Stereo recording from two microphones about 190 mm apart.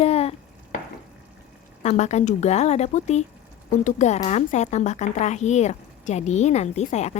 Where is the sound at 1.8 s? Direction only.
35° left (ahead or behind).